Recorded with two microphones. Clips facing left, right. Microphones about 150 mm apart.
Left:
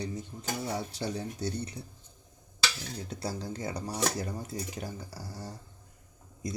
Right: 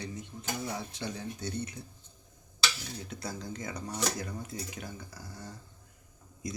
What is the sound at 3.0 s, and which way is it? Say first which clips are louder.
Speech: left 5 dB; 30° left (ahead or behind).